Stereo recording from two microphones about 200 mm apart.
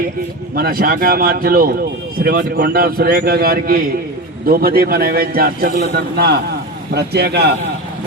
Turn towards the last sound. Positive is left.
turn(degrees=-55)  # may be behind; listen again after turning